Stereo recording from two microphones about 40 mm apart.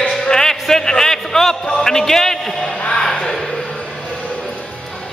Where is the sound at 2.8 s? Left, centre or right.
Left.